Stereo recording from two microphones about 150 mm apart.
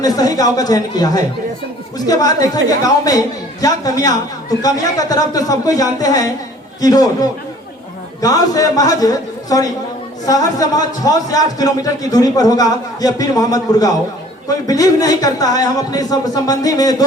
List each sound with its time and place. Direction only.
0.0 s a man's voice: 25° left (ahead or behind)